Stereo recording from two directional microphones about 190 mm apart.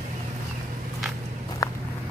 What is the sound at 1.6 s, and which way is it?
Walk, 20° left (ahead or behind).